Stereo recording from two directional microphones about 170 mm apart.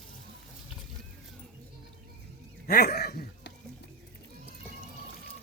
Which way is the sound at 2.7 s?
65° left (ahead or behind).